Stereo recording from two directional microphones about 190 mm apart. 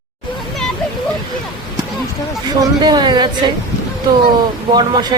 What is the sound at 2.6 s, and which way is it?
Speech, 20° right (ahead or behind).